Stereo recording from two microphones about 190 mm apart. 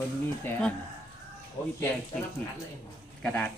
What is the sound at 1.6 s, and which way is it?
Speech, 25° left (ahead or behind).